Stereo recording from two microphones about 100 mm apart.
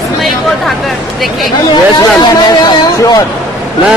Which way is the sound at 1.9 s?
45° left (ahead or behind).